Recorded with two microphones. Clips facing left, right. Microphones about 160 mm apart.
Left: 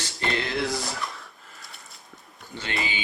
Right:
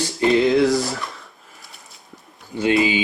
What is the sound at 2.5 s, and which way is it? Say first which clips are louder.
Speech: right 15 dB; 10° right (ahead or behind).